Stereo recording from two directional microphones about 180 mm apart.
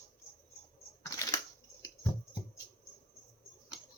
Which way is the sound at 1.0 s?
20° left (ahead or behind).